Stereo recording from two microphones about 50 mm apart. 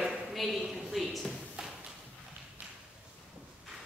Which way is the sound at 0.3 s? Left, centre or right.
Centre.